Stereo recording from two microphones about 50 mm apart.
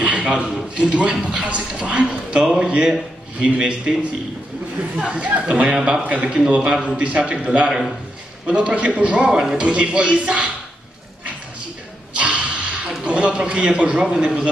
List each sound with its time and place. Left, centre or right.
0.0 s a sound: right
0.7 s speech: right
4.9 s speech: right
9.6 s speech: right
12.2 s a sound: right
13.0 s speech: right